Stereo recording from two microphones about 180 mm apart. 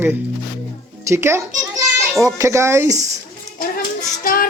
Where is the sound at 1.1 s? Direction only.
15° right (ahead or behind).